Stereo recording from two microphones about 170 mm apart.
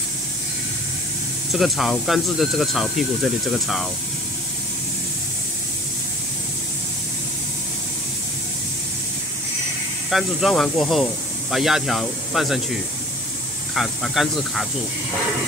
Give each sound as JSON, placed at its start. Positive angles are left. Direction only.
{"t": 1.5, "sound": "speech", "side_deg": 0}
{"t": 10.0, "sound": "speech", "side_deg": 0}
{"t": 13.7, "sound": "speech", "side_deg": 0}